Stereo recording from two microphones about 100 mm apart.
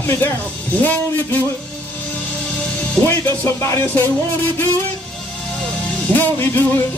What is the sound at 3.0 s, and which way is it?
Music, 25° left (ahead or behind).